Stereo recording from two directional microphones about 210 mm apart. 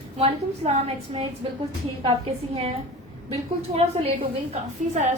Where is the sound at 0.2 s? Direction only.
30° right (ahead or behind).